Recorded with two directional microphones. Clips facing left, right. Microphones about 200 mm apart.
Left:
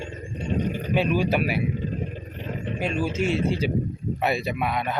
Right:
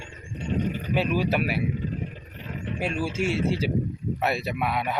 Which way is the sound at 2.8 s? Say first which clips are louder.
Left 2 dB; 5° right (ahead or behind).